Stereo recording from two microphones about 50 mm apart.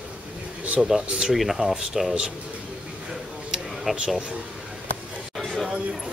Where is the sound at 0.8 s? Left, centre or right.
Centre.